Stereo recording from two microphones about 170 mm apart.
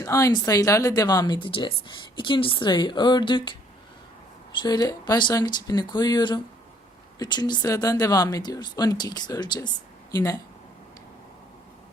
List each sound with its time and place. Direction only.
0.0 s speech: 20° left (ahead or behind)
4.5 s speech: 25° left (ahead or behind)